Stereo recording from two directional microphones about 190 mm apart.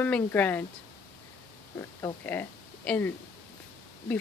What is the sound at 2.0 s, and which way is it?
Speech, 10° left (ahead or behind).